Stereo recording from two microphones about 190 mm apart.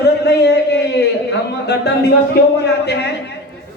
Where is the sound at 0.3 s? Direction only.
60° left (ahead or behind).